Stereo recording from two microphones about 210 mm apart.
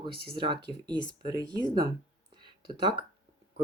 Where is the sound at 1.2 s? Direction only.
20° right (ahead or behind).